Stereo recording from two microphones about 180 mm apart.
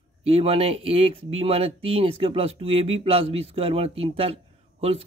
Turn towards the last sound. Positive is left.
turn(degrees=-35)  # may be behind; listen again after turning